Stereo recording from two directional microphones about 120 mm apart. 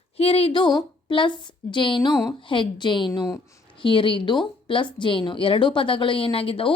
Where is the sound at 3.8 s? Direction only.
45° left (ahead or behind).